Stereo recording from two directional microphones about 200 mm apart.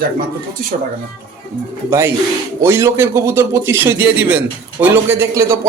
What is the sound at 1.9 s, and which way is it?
A man's voice, 15° right (ahead or behind).